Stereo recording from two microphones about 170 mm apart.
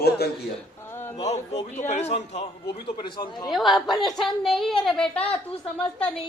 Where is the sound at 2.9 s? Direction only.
25° left (ahead or behind).